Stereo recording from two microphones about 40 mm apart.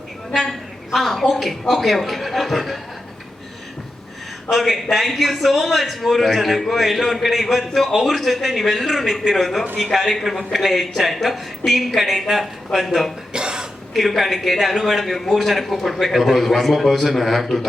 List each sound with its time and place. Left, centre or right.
0.9 s a man's voice: centre
4.4 s a man's voice: centre
13.3 s throat clearing: right
13.9 s a man's voice: centre